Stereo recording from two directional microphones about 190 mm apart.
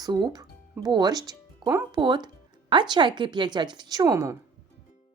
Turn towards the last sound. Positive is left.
turn(degrees=-20)  # may be behind; listen again after turning